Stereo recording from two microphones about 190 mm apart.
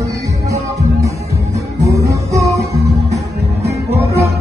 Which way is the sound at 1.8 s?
15° right (ahead or behind).